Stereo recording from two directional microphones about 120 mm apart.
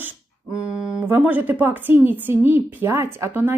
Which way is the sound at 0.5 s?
5° right (ahead or behind).